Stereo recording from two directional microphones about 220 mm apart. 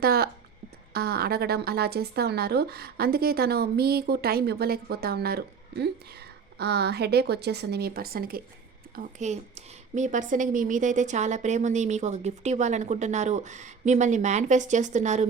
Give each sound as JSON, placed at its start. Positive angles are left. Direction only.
{"t": 0.0, "sound": "a woman's voice", "side_deg": -45}